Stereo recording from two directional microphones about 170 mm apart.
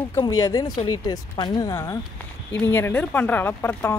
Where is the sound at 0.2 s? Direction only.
20° left (ahead or behind).